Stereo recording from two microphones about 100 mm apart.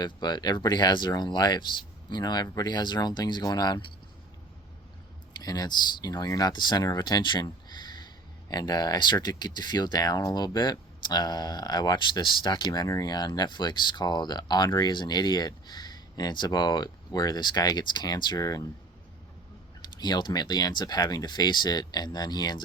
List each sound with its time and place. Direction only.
0.0 s speech: 45° left (ahead or behind)
5.4 s speech: 40° left (ahead or behind)
20.0 s speech: 45° left (ahead or behind)